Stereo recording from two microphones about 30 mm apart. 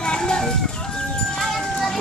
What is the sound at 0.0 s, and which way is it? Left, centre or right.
Chicken, left.